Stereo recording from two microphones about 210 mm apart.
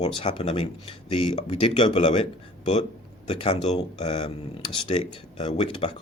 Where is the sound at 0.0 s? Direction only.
25° left (ahead or behind).